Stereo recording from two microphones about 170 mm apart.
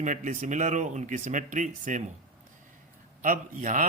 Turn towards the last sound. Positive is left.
turn(degrees=-50)  # may be behind; listen again after turning